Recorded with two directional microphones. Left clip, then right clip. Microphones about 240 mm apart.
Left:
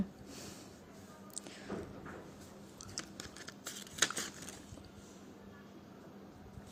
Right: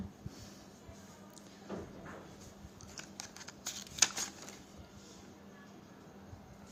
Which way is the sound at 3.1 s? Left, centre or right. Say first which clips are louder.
Even; centre.